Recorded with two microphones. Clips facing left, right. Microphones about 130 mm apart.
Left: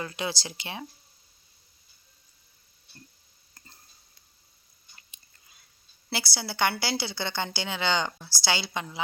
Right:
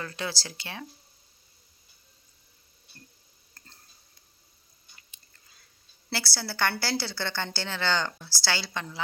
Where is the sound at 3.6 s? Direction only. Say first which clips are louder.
Left 1 dB; 10° left (ahead or behind).